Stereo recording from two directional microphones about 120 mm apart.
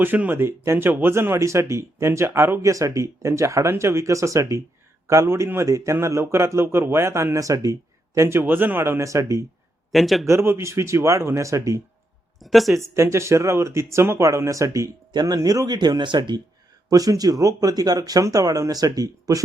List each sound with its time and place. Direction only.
0.0 s speech: 15° right (ahead or behind)
9.9 s speech: centre (ahead or behind)
10.2 s speech: 20° right (ahead or behind)
12.4 s speech: centre (ahead or behind)
12.7 s speech: 25° right (ahead or behind)